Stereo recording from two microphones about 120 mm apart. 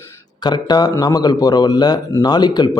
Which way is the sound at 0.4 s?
35° left (ahead or behind).